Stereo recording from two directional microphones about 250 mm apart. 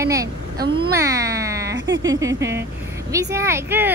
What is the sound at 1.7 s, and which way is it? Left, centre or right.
Speech, right.